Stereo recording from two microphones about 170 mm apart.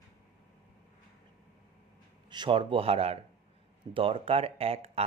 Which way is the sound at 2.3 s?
30° right (ahead or behind).